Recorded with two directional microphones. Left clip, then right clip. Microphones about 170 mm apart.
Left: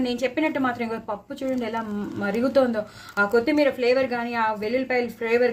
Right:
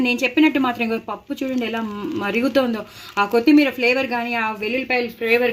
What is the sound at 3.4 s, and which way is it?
Speech, 55° right (ahead or behind).